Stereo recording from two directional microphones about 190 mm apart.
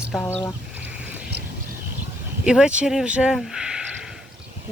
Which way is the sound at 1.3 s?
65° right (ahead or behind).